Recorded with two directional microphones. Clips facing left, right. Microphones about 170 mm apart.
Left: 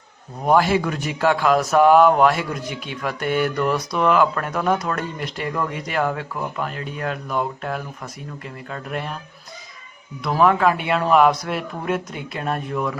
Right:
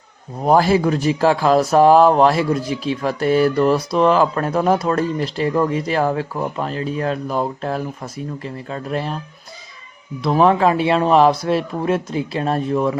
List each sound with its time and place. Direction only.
0.4 s speech: 35° right (ahead or behind)
10.2 s speech: 30° right (ahead or behind)